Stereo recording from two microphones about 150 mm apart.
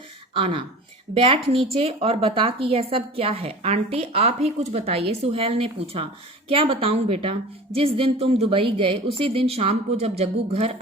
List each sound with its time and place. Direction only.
0.3 s speech: 35° right (ahead or behind)